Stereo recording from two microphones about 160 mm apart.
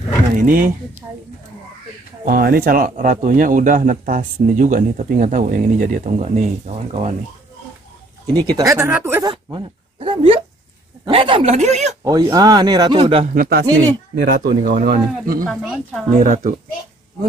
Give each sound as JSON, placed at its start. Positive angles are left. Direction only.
{"t": 0.4, "sound": "a man's voice", "side_deg": -65}
{"t": 2.2, "sound": "a man's voice", "side_deg": -65}
{"t": 8.3, "sound": "a man's voice", "side_deg": -25}
{"t": 9.2, "sound": "speech", "side_deg": -30}
{"t": 12.0, "sound": "a man's voice", "side_deg": -25}
{"t": 13.3, "sound": "speech", "side_deg": -75}
{"t": 14.1, "sound": "speech", "side_deg": -90}
{"t": 14.7, "sound": "a man's voice", "side_deg": -60}
{"t": 15.6, "sound": "speech", "side_deg": -5}
{"t": 16.1, "sound": "speech", "side_deg": -55}